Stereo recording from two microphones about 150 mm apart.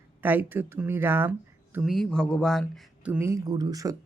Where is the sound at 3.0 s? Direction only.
15° right (ahead or behind).